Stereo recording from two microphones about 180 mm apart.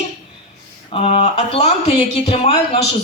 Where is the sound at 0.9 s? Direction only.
35° left (ahead or behind).